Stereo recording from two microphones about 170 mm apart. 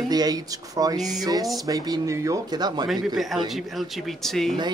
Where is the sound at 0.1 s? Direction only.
20° right (ahead or behind).